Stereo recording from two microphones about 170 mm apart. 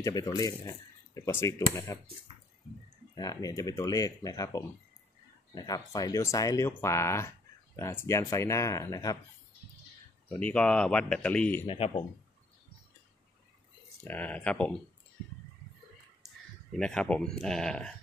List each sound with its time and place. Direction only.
0.0 s speech: 20° left (ahead or behind)
3.2 s speech: 20° left (ahead or behind)
10.4 s speech: 5° left (ahead or behind)
11.6 s speech: 30° left (ahead or behind)
14.0 s speech: 10° left (ahead or behind)
16.7 s speech: 5° left (ahead or behind)